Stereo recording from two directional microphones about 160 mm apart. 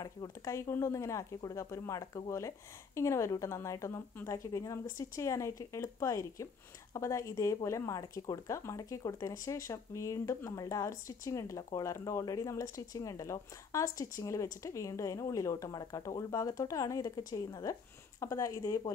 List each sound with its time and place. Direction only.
0.0 s speech: 20° left (ahead or behind)